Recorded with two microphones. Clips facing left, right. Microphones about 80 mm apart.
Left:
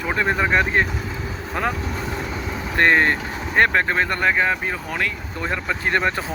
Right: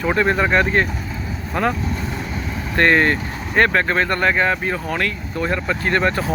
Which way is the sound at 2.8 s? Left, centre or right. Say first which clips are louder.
Right 1 dB; centre.